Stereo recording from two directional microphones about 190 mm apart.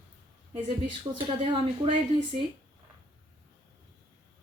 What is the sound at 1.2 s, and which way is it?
A woman's voice, 25° right (ahead or behind).